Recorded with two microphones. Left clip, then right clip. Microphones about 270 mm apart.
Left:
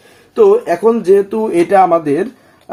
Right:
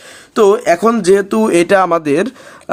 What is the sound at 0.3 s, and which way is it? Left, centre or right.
Speech, right.